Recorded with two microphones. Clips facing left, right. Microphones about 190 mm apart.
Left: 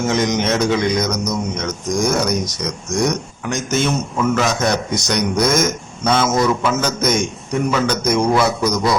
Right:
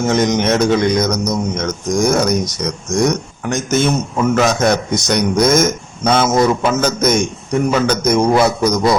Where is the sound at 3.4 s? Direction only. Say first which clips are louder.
Right 4 dB; 50° right (ahead or behind).